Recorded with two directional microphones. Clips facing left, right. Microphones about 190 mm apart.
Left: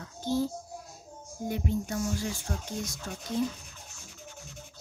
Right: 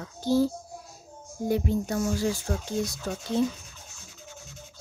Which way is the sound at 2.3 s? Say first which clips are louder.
Right 6 dB; 30° right (ahead or behind).